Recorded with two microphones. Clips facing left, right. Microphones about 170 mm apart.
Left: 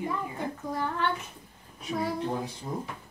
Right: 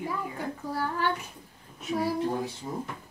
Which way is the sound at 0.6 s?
5° right (ahead or behind).